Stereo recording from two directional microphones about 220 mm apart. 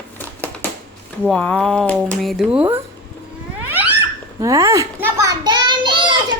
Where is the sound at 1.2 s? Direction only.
5° left (ahead or behind).